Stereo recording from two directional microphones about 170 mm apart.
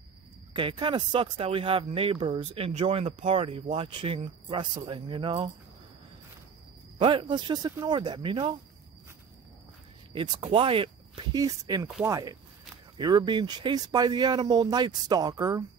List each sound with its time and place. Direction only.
0.5 s speech: 30° right (ahead or behind)
7.0 s speech: 30° right (ahead or behind)
10.1 s speech: 30° right (ahead or behind)